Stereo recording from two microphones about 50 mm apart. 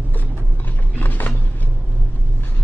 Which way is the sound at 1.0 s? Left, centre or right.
Left.